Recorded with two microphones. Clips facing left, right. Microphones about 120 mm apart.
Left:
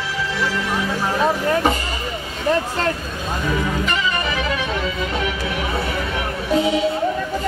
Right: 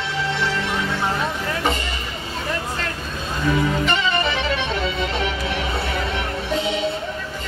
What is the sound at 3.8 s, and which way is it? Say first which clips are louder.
Music: right 1 dB; 30° right (ahead or behind).